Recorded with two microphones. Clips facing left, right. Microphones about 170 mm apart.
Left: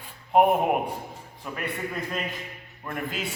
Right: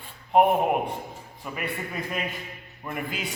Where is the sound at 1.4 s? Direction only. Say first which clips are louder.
Left 1 dB; 5° right (ahead or behind).